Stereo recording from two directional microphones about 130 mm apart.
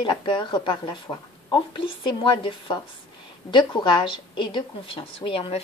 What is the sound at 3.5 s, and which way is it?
A woman's voice, 40° left (ahead or behind).